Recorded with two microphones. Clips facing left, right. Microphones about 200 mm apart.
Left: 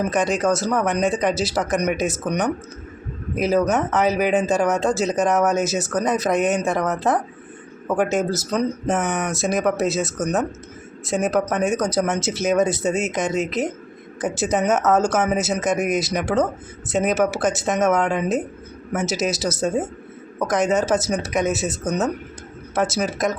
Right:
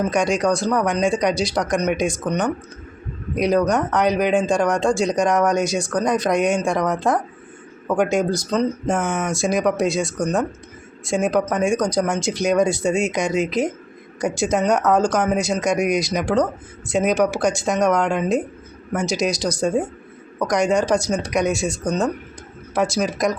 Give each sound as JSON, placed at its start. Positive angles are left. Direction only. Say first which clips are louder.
{"t": 0.0, "sound": "speech", "louder": "right 1 dB", "side_deg": 5}